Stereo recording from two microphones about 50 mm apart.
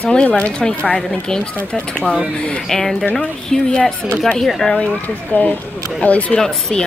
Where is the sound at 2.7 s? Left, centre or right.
Centre.